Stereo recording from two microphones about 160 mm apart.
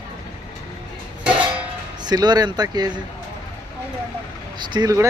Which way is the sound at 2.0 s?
25° right (ahead or behind).